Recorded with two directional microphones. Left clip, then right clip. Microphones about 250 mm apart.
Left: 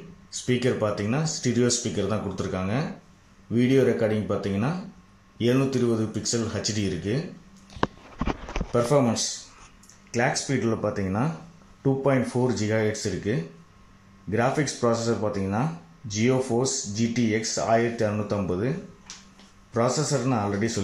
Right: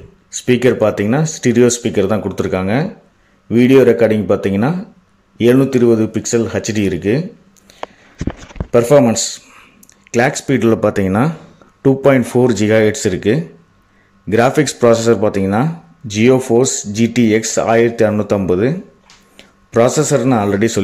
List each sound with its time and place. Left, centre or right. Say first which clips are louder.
0.5 s speech: right 12 dB; right
8.5 s speech: right 13 dB; right
10.5 s speech: right 13 dB; right
19.7 s speech: right 13 dB; right